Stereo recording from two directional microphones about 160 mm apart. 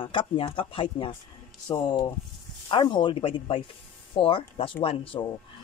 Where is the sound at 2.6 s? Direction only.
30° left (ahead or behind).